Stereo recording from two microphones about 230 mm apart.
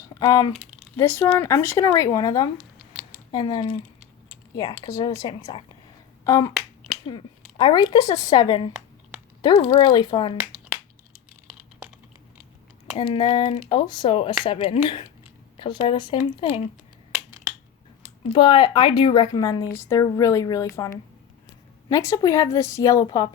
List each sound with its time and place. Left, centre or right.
0.1 s speech: centre
13.0 s speech: left
18.3 s speech: centre
21.8 s speech: centre